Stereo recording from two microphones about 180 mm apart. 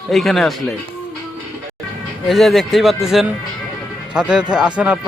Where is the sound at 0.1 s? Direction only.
Centre (ahead or behind).